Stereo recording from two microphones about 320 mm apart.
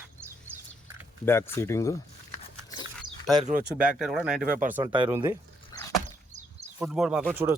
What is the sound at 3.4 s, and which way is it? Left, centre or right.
Speech, right.